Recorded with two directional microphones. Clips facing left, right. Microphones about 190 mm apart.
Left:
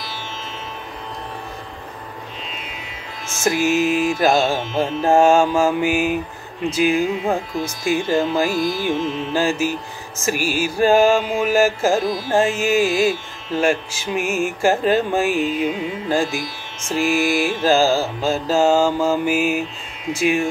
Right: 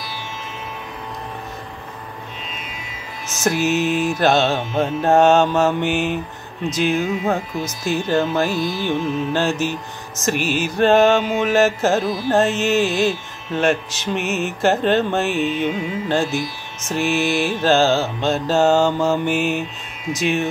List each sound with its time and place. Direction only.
3.4 s music: centre (ahead or behind)
7.2 s music: 10° left (ahead or behind)